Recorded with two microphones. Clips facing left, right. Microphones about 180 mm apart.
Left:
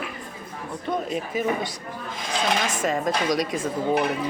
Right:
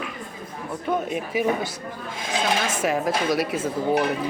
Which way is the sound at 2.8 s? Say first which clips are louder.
Right 1 dB; 5° right (ahead or behind).